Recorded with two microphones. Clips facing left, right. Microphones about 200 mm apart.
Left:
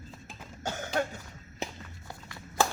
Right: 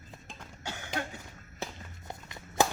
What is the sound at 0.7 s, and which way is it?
Cough, 45° left (ahead or behind).